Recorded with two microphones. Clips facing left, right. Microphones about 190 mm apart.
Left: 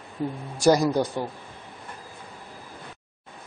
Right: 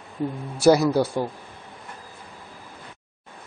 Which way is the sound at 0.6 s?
5° right (ahead or behind).